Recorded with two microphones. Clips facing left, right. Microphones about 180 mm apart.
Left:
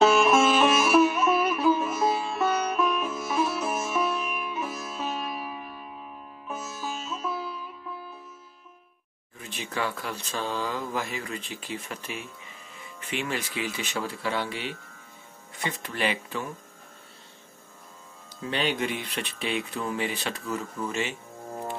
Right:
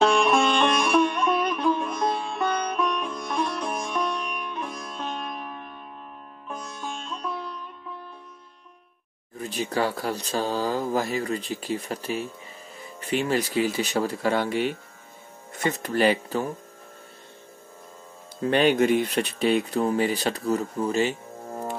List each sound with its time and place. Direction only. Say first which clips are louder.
0.0 s music: left 1 dB; 5° left (ahead or behind)
9.4 s speech: right 6 dB; 35° right (ahead or behind)
18.4 s speech: right 8 dB; 50° right (ahead or behind)